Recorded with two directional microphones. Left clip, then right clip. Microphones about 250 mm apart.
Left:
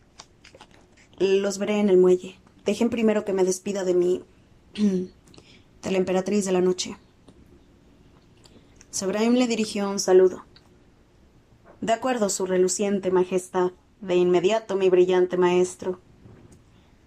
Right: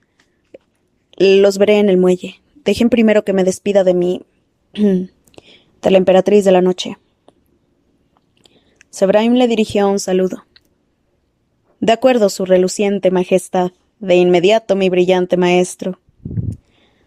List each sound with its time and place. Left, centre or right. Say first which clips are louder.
1.1 s a woman's voice: right 12 dB; right
8.4 s speech: right 3 dB; right
11.8 s speech: right 12 dB; right